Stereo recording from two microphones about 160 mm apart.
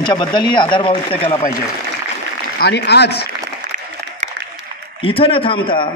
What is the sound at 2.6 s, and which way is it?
Speech, 90° left.